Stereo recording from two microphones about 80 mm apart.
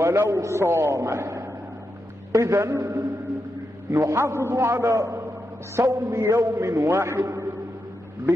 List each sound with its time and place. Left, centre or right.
0.0 s a man's voice: right